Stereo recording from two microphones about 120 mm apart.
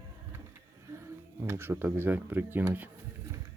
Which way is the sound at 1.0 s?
20° right (ahead or behind).